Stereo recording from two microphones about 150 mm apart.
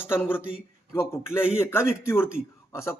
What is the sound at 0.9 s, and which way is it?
A man's voice, 15° left (ahead or behind).